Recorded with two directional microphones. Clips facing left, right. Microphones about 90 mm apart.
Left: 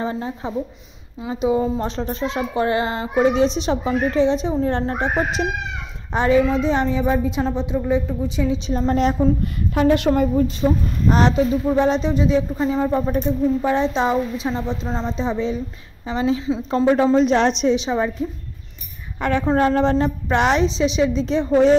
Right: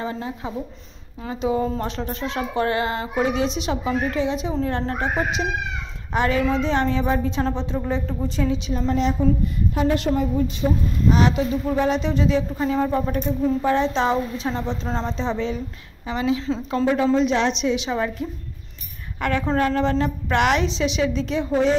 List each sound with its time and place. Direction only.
0.0 s speech: 30° left (ahead or behind)
1.3 s speech: 20° left (ahead or behind)
6.1 s a woman's voice: 20° left (ahead or behind); by 8.5 s 5° left (ahead or behind)
8.8 s a woman's voice: 45° left (ahead or behind)
9.4 s a woman's voice: 75° left (ahead or behind)
10.3 s a woman's voice: 40° left (ahead or behind)
11.6 s a woman's voice: 20° left (ahead or behind)
16.1 s a woman's voice: 30° left (ahead or behind)
16.3 s a woman's voice: 10° left (ahead or behind)
16.7 s a woman's voice: 30° left (ahead or behind)
17.7 s speech: 20° left (ahead or behind)
19.1 s speech: 25° left (ahead or behind)